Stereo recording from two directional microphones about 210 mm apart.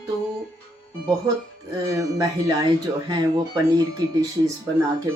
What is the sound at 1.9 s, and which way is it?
Speech, 15° right (ahead or behind).